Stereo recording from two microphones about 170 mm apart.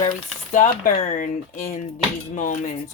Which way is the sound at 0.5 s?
45° left (ahead or behind).